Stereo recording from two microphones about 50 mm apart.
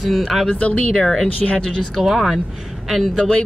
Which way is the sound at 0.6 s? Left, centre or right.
Left.